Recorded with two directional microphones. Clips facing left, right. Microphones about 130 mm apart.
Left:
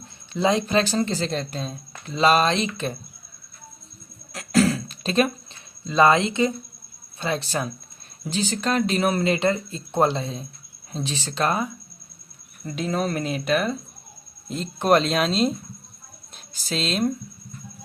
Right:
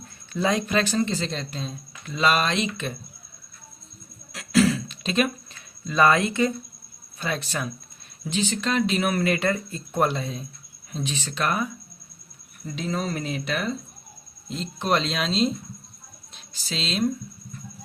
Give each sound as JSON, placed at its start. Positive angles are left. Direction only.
{"t": 0.3, "sound": "speech", "side_deg": 25}
{"t": 2.0, "sound": "speech", "side_deg": 30}
{"t": 4.3, "sound": "throat clearing", "side_deg": 45}
{"t": 7.2, "sound": "speech", "side_deg": 30}
{"t": 9.1, "sound": "speech", "side_deg": 25}
{"t": 12.7, "sound": "speech", "side_deg": 55}